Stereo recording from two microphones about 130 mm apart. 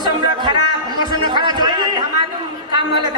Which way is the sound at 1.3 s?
35° right (ahead or behind).